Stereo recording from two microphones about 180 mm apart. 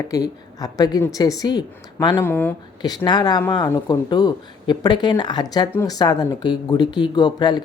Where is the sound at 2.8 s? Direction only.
25° left (ahead or behind).